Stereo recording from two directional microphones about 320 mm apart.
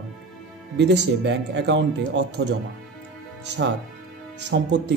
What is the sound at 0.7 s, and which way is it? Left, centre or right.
Speech, right.